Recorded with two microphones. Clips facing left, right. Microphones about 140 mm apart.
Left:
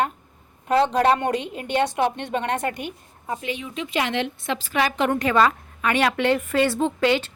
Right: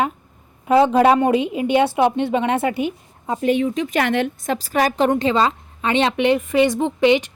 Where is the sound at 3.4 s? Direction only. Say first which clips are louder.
Right 11 dB; 50° right (ahead or behind); by 7.3 s 20° right (ahead or behind).